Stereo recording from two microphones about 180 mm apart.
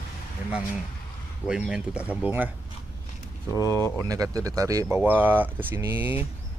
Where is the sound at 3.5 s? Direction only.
20° right (ahead or behind).